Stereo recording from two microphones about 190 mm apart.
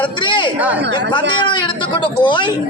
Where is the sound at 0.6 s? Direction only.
10° right (ahead or behind).